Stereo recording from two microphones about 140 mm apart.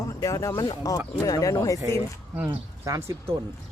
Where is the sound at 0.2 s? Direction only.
20° left (ahead or behind).